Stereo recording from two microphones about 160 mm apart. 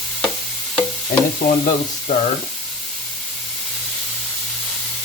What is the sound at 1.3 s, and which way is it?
Frying, 50° left (ahead or behind).